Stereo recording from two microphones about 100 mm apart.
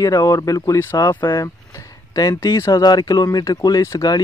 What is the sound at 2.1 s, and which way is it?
Speech, 40° left (ahead or behind).